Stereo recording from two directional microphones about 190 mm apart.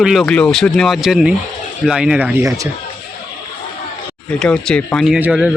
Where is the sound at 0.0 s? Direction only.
Centre (ahead or behind).